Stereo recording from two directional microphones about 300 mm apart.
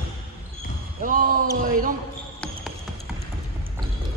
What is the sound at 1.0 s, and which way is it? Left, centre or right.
Speech, right.